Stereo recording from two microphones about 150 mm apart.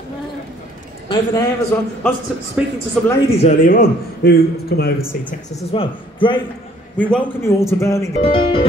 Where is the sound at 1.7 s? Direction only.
15° left (ahead or behind).